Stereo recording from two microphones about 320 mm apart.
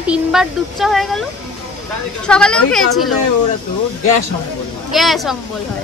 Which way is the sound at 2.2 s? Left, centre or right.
Centre.